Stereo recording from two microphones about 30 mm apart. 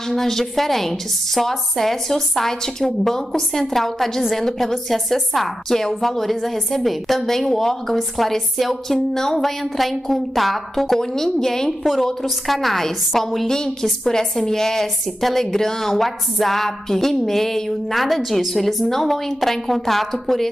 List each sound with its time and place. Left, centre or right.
0.1 s a woman's voice: centre
9.1 s a woman's voice: centre
9.4 s a woman's voice: centre
11.0 s a woman's voice: centre
11.8 s a woman's voice: centre